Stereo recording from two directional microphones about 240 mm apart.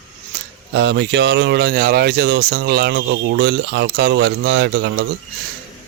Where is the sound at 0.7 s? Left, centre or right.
Right.